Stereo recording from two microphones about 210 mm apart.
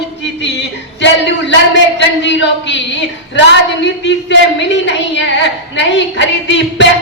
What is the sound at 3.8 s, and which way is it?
A man's voice, 55° left (ahead or behind).